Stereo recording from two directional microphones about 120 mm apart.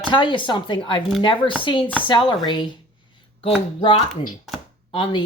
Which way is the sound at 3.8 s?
50° left (ahead or behind).